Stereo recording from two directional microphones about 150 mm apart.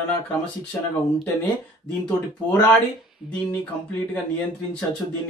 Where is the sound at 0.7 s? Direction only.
15° left (ahead or behind).